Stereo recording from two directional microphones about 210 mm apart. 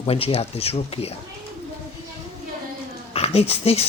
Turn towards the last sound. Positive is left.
turn(degrees=30)  # may be behind; listen again after turning